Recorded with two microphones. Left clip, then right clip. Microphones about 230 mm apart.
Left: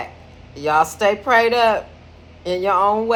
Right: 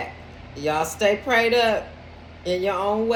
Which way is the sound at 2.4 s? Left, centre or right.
Centre.